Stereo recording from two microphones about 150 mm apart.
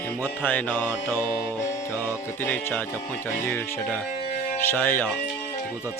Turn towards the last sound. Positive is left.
turn(degrees=15)  # may be behind; listen again after turning